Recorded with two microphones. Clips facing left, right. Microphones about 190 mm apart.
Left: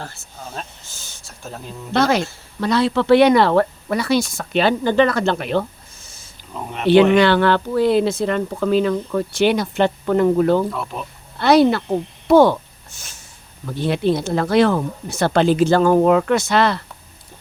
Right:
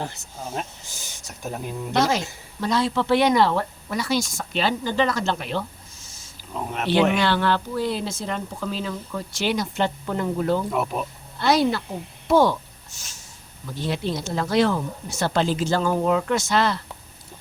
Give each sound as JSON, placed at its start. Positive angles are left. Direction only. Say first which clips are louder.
{"t": 0.0, "sound": "speech", "louder": "right 2 dB", "side_deg": -15}
{"t": 1.9, "sound": "speech", "louder": "left 5 dB", "side_deg": 65}
{"t": 6.5, "sound": "speech", "louder": "even", "side_deg": 0}
{"t": 7.1, "sound": "speech", "louder": "left 7 dB", "side_deg": 60}
{"t": 10.7, "sound": "speech", "louder": "right 2 dB", "side_deg": -15}
{"t": 11.3, "sound": "speech", "louder": "left 7 dB", "side_deg": 65}